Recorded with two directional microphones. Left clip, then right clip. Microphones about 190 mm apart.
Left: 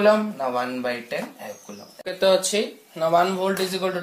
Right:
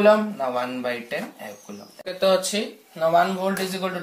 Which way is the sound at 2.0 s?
40° left (ahead or behind).